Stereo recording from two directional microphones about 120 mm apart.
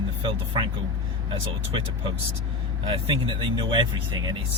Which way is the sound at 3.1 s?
45° right (ahead or behind).